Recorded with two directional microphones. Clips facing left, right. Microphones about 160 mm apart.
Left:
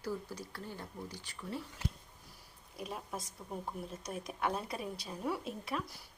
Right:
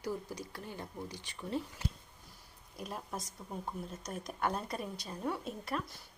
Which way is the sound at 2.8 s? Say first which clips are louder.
Even; centre (ahead or behind).